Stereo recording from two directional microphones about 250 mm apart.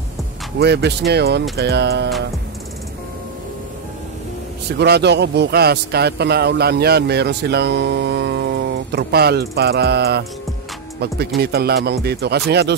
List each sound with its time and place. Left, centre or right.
0.6 s speech: right
4.7 s speech: right